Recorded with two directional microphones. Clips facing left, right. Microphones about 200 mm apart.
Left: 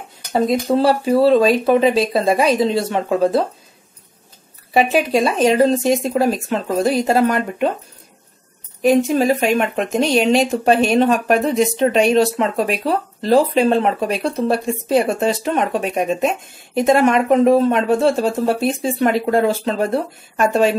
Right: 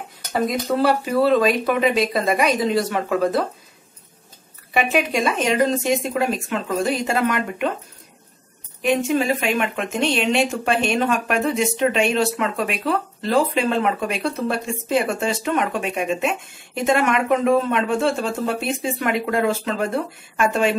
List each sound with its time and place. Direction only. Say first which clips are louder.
0.3 s speech: left 5 dB; 30° left (ahead or behind)
4.7 s speech: left 5 dB; 30° left (ahead or behind)
8.8 s speech: left 5 dB; 40° left (ahead or behind)